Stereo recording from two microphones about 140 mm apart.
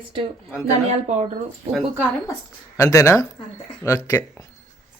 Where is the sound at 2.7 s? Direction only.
20° left (ahead or behind).